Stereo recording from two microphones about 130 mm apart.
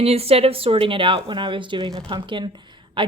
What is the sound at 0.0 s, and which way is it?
Speech, 50° right (ahead or behind).